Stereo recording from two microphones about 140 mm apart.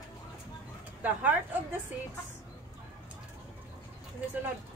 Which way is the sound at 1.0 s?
10° right (ahead or behind).